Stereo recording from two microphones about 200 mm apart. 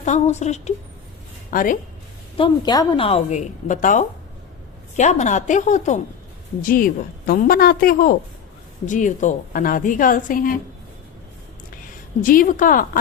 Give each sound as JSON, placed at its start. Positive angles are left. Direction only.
{"t": 0.0, "sound": "a woman's voice", "side_deg": 35}
{"t": 2.4, "sound": "a woman's voice", "side_deg": 25}
{"t": 12.2, "sound": "a woman's voice", "side_deg": 45}